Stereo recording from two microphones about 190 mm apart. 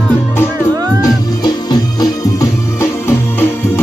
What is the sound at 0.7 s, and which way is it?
Music, 20° right (ahead or behind).